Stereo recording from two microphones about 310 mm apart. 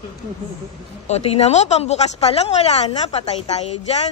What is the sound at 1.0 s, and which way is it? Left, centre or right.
Speech, left.